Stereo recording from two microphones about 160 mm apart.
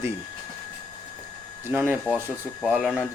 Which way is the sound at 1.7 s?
10° right (ahead or behind).